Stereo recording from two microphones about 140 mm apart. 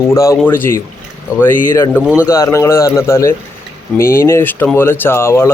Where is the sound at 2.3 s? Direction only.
20° left (ahead or behind).